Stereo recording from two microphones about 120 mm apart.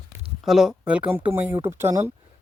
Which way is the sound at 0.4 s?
5° right (ahead or behind).